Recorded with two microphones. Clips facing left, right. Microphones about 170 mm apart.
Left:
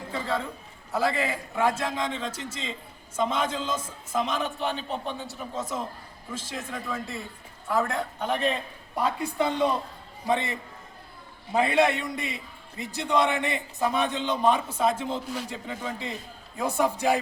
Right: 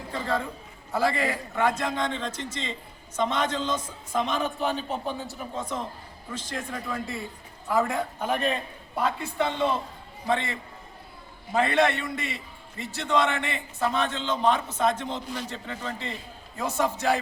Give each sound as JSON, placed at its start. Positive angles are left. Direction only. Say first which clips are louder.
{"t": 0.1, "sound": "a man's voice", "louder": "right 1 dB", "side_deg": 5}
{"t": 9.0, "sound": "a man's voice", "louder": "even", "side_deg": 10}